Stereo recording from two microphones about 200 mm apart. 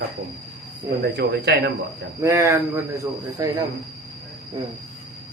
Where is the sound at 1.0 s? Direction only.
55° right (ahead or behind).